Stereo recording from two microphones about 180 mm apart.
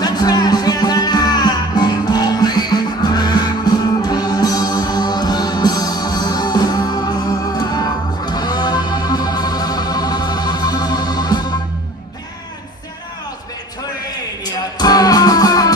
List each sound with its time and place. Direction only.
0.0 s music: 20° left (ahead or behind)
14.4 s music: 20° left (ahead or behind)